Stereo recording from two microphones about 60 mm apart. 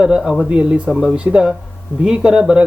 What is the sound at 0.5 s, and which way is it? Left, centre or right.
A man's voice, right.